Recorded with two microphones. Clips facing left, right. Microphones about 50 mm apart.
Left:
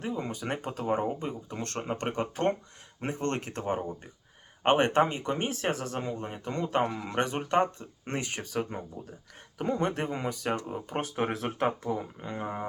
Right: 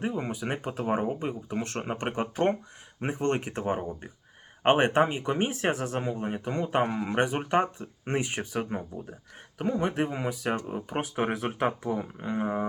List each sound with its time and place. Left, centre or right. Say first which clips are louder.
0.0 s speech: right 3 dB; right
0.3 s speech: right 2 dB; centre
9.6 s speech: right 2 dB; centre